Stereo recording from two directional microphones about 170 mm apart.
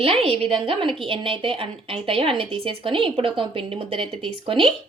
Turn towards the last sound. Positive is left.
turn(degrees=-30)  # may be behind; listen again after turning